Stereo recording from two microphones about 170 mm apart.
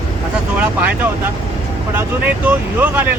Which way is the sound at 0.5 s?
10° right (ahead or behind).